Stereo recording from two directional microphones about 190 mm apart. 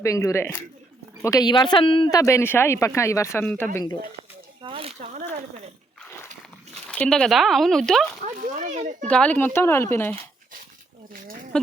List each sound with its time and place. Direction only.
0.0 s speech: 15° left (ahead or behind)
4.6 s a sound: 30° right (ahead or behind)
6.9 s speech: 5° left (ahead or behind)
8.2 s speech: 40° right (ahead or behind)
9.0 s speech: 5° left (ahead or behind)
11.1 s a sound: 45° right (ahead or behind)